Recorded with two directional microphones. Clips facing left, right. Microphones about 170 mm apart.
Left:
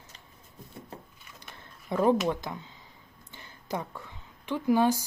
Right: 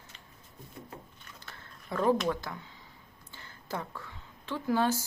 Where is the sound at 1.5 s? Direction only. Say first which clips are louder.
Left 5 dB; 20° left (ahead or behind).